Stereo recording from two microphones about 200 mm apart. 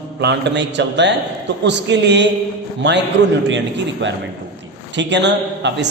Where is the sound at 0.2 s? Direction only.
60° right (ahead or behind).